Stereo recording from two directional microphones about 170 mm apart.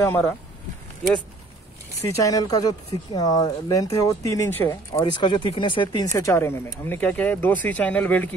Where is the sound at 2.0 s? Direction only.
20° left (ahead or behind).